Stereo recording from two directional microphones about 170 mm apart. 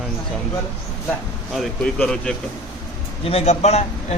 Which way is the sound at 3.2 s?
40° left (ahead or behind).